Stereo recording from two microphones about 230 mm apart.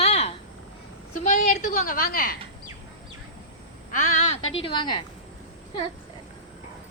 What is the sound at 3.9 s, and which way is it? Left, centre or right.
Speech, left.